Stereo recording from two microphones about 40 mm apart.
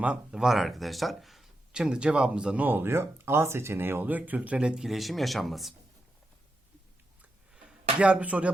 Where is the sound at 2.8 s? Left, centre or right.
Right.